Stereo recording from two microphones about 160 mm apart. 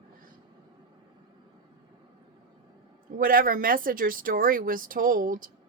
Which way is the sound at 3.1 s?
60° right (ahead or behind).